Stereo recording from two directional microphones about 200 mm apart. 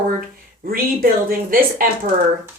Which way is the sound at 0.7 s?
45° right (ahead or behind).